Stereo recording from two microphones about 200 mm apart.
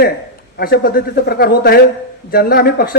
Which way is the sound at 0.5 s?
50° left (ahead or behind).